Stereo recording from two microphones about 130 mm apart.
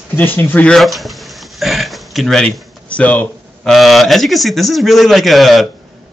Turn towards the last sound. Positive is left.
turn(degrees=0)  # may be behind; listen again after turning